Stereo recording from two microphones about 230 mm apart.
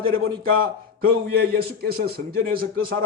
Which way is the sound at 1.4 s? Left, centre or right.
Right.